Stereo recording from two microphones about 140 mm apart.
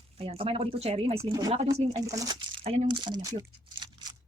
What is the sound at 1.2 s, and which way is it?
Speech, 25° right (ahead or behind).